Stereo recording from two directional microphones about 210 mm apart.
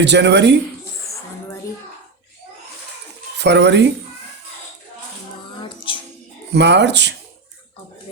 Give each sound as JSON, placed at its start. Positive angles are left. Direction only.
{"t": 0.0, "sound": "speech", "side_deg": -55}
{"t": 1.1, "sound": "a sound", "side_deg": 15}
{"t": 3.3, "sound": "speech", "side_deg": -55}
{"t": 5.5, "sound": "music", "side_deg": 25}
{"t": 6.5, "sound": "speech", "side_deg": -55}